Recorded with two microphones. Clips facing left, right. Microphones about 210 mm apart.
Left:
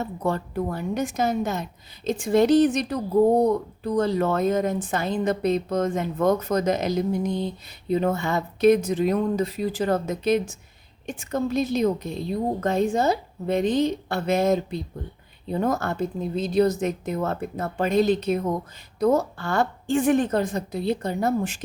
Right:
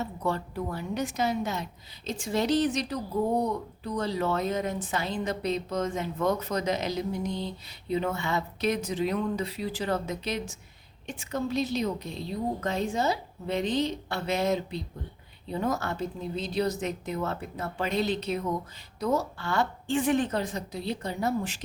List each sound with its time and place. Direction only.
0.0 s speech: 50° left (ahead or behind)